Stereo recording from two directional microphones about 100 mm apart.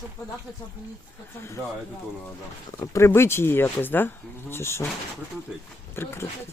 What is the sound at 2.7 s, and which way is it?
Speech, 30° left (ahead or behind).